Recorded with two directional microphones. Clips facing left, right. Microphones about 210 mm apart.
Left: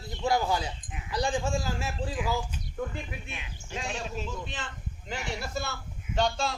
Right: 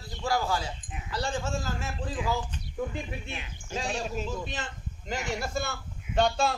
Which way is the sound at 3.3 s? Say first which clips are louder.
Right 3 dB; 35° right (ahead or behind).